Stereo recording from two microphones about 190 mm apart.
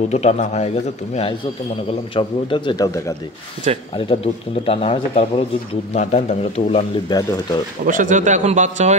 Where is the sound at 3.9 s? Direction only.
30° left (ahead or behind).